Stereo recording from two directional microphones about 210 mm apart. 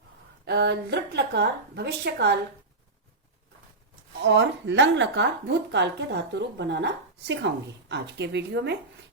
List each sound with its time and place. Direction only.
0.4 s a woman's voice: 55° right (ahead or behind)
4.2 s a woman's voice: 60° right (ahead or behind)